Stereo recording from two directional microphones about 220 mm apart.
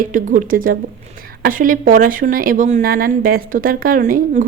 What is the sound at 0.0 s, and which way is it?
A woman's voice, 35° right (ahead or behind).